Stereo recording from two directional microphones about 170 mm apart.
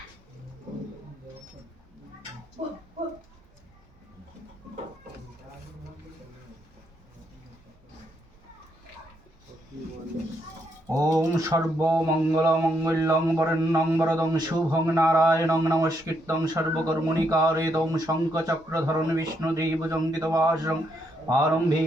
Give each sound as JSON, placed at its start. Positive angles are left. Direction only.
{"t": 10.8, "sound": "speech", "side_deg": -20}